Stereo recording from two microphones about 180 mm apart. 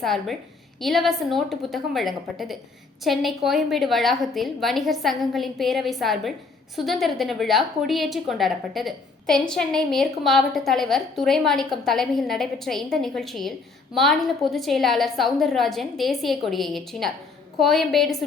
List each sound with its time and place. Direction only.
0.0 s a woman's voice: centre (ahead or behind)